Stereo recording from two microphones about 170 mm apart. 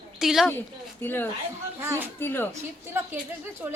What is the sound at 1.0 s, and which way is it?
Speech, 10° left (ahead or behind).